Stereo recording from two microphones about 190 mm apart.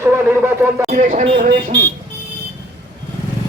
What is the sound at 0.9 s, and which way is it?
Speech, 40° right (ahead or behind).